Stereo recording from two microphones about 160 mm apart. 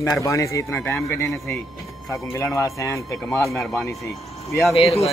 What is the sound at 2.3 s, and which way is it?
A man's voice, 20° left (ahead or behind).